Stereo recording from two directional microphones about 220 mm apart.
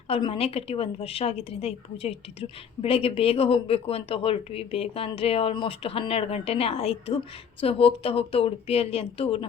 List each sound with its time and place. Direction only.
0.1 s a woman's voice: 25° left (ahead or behind)